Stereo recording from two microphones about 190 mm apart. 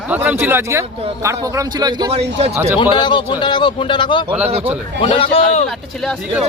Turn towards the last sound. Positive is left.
turn(degrees=30)  # may be behind; listen again after turning